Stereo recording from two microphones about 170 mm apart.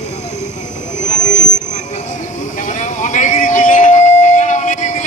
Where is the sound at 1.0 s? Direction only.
45° left (ahead or behind).